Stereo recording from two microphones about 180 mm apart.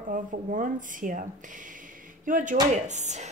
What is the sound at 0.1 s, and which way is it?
A woman's voice, 50° right (ahead or behind).